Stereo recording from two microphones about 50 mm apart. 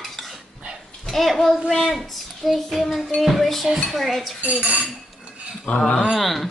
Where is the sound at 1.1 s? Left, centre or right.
Centre.